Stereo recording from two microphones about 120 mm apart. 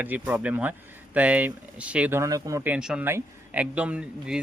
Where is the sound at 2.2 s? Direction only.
30° right (ahead or behind).